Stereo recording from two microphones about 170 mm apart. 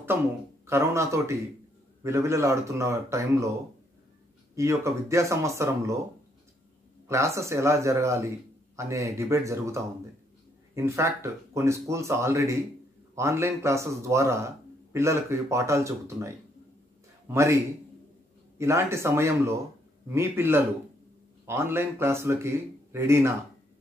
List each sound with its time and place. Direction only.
0.7 s a man's voice: 15° right (ahead or behind)
4.6 s a man's voice: 15° right (ahead or behind)
7.1 s a man's voice: 15° right (ahead or behind)
18.6 s a man's voice: 15° right (ahead or behind)